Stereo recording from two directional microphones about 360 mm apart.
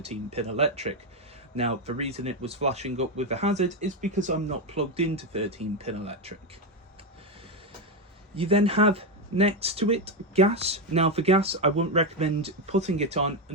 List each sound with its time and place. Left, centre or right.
0.0 s speech: centre
8.4 s speech: centre